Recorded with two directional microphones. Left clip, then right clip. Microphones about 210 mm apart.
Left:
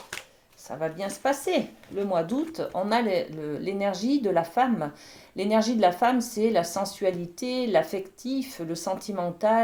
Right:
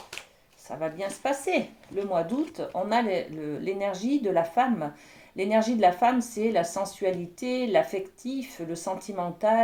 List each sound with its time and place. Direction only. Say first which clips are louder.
0.8 s speech: left 1 dB; 35° left (ahead or behind)